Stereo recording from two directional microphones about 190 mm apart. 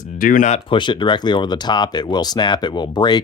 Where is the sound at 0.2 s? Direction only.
45° left (ahead or behind).